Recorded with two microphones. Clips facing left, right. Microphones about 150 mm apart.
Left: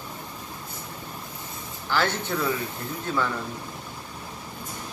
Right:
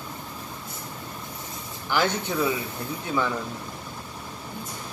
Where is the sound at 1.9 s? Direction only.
15° right (ahead or behind).